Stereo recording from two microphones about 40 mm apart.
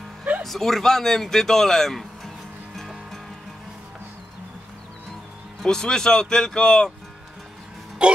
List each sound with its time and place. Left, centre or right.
0.4 s speech: centre
5.7 s speech: centre
8.0 s speech: right